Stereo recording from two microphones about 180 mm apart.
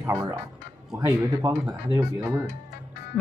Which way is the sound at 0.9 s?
15° right (ahead or behind).